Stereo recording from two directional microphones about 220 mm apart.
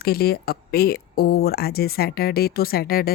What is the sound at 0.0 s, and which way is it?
Speech, 45° left (ahead or behind).